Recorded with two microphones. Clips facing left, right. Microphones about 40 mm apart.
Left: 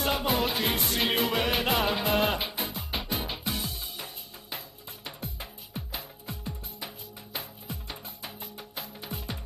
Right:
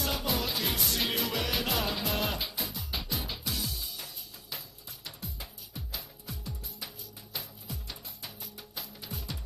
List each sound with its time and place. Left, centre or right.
0.0 s music: left